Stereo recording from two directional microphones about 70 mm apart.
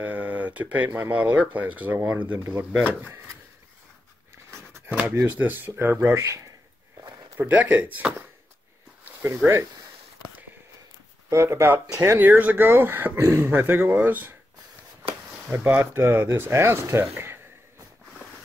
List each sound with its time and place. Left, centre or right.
0.0 s a sound: right
1.1 s speech: centre
5.2 s speech: right
6.0 s speech: right
7.3 s speech: right
9.0 s a sound: right
11.2 s speech: right
15.5 s speech: right